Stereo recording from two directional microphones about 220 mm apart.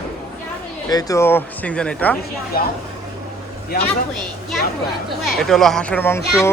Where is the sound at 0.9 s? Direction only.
15° left (ahead or behind).